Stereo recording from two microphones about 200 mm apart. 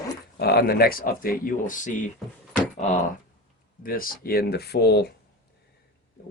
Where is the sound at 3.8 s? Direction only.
45° left (ahead or behind).